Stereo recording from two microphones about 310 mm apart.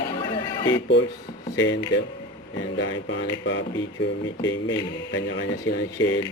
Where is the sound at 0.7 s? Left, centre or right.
Left.